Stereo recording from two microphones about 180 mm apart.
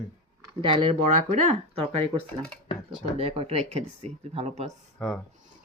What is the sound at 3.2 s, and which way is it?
Speech, 30° right (ahead or behind).